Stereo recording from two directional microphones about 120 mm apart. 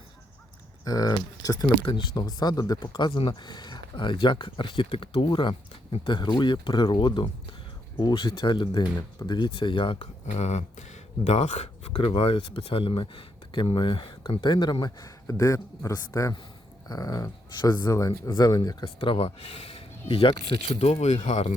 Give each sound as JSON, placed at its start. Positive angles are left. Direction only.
{"t": 0.9, "sound": "speech", "side_deg": 30}
{"t": 11.9, "sound": "speech", "side_deg": 50}